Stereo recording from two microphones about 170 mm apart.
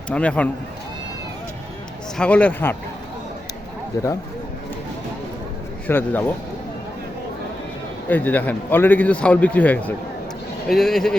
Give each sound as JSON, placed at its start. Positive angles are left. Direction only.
{"t": 0.1, "sound": "a man's voice", "side_deg": 5}
{"t": 2.1, "sound": "a man's voice", "side_deg": 5}
{"t": 3.9, "sound": "speech", "side_deg": 20}
{"t": 5.9, "sound": "a man's voice", "side_deg": 10}
{"t": 8.1, "sound": "a man's voice", "side_deg": 10}